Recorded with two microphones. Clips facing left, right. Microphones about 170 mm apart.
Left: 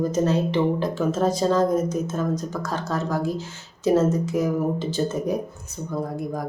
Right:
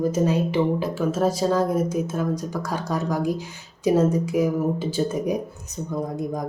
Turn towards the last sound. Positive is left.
turn(degrees=-20)  # may be behind; listen again after turning